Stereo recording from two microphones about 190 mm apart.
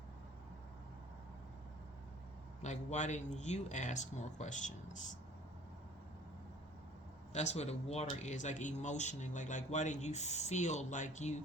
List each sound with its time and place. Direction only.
2.6 s speech: 40° left (ahead or behind)
7.3 s speech: 35° left (ahead or behind)